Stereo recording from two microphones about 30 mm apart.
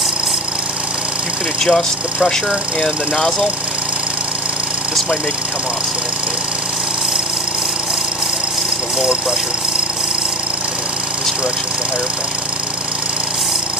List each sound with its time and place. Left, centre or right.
1.6 s speech: centre